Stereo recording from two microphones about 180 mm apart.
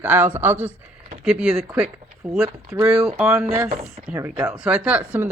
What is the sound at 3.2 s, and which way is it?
Speech, centre (ahead or behind).